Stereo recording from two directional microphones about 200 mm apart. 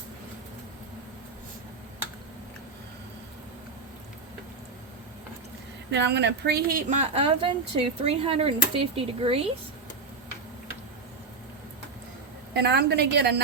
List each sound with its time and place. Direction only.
5.9 s speech: 60° right (ahead or behind); by 9.5 s 30° right (ahead or behind)
12.5 s a woman's voice: 55° right (ahead or behind)